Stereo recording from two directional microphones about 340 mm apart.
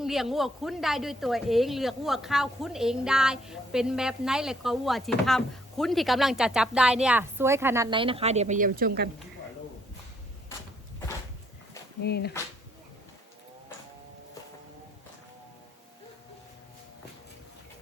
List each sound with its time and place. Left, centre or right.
0.0 s speech: centre; by 9.0 s right
12.0 s speech: left